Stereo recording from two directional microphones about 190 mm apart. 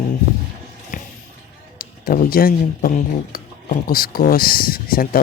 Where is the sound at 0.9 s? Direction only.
45° left (ahead or behind).